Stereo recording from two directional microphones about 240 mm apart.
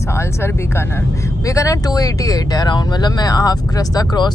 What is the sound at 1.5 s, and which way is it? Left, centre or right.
Speech, centre.